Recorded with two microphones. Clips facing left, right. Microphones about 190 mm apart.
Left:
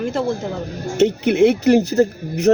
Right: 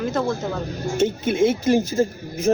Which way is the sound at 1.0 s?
70° left (ahead or behind).